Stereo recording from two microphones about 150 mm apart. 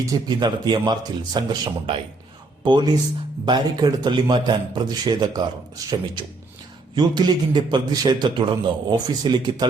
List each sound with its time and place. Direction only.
0.0 s a man's voice: 25° right (ahead or behind)
3.4 s a man's voice: 30° right (ahead or behind)